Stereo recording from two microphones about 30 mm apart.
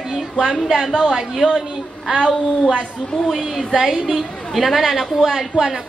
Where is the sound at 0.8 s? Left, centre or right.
Centre.